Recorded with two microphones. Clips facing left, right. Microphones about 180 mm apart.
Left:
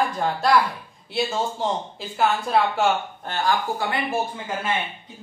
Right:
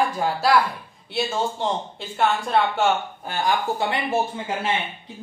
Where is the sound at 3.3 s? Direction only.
20° right (ahead or behind).